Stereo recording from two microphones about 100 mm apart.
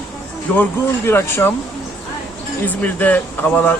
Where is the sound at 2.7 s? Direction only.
15° left (ahead or behind).